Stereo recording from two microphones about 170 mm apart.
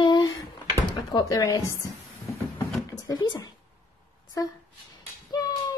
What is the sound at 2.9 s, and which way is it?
Speech, 25° left (ahead or behind).